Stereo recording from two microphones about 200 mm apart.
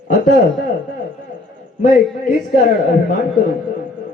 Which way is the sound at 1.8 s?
45° left (ahead or behind).